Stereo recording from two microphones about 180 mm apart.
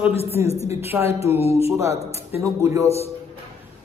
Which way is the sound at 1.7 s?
15° right (ahead or behind).